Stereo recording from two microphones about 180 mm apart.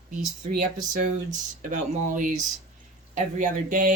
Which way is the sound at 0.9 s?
45° right (ahead or behind).